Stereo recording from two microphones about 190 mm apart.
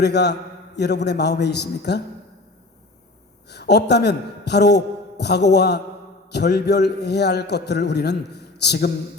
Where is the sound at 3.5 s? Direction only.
60° left (ahead or behind).